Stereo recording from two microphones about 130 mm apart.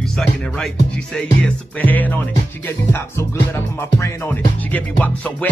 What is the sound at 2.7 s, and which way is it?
Music, 20° left (ahead or behind).